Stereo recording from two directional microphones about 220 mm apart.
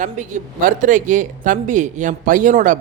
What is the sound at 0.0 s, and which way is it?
Speech, 35° right (ahead or behind).